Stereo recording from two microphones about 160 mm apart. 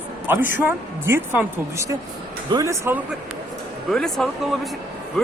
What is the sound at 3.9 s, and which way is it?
Speech, 5° left (ahead or behind).